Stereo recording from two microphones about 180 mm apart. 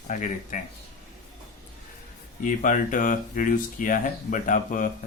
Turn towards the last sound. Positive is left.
turn(degrees=45)  # may be behind; listen again after turning